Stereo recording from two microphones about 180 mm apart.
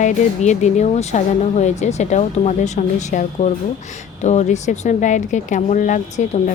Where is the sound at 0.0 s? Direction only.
40° left (ahead or behind).